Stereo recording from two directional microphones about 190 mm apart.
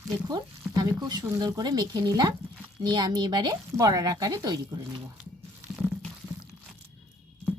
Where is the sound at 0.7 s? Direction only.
20° right (ahead or behind).